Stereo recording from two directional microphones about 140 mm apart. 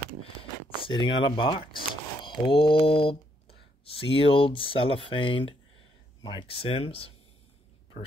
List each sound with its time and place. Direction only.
0.4 s speech: 40° left (ahead or behind)